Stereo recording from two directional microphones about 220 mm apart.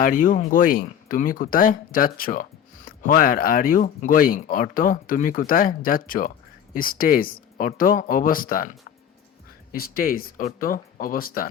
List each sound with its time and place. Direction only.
0.0 s speech: 40° left (ahead or behind)
9.7 s speech: 40° left (ahead or behind)